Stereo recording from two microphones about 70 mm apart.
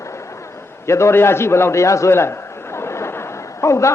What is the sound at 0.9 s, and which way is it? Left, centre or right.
A man's voice, left.